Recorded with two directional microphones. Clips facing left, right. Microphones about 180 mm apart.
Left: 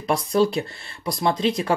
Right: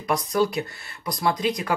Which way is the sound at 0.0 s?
30° left (ahead or behind).